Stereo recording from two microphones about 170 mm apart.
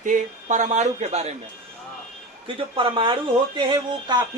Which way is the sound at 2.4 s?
30° right (ahead or behind).